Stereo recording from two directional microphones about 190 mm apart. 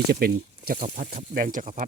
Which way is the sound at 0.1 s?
50° right (ahead or behind).